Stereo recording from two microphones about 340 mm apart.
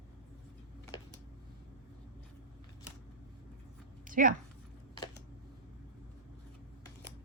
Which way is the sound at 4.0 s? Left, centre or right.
Right.